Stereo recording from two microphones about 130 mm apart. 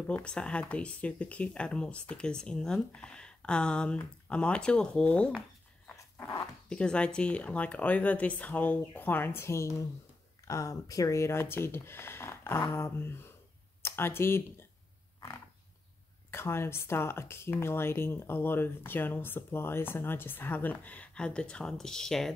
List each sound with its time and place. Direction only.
0.0 s speech: 10° left (ahead or behind)
5.9 s dog: 20° left (ahead or behind)
6.7 s speech: 5° left (ahead or behind)
15.1 s roaring cats: 25° left (ahead or behind)
16.3 s speech: 20° left (ahead or behind); by 22.3 s 5° left (ahead or behind)